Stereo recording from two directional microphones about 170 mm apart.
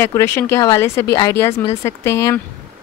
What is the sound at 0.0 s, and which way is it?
Speech, 15° left (ahead or behind).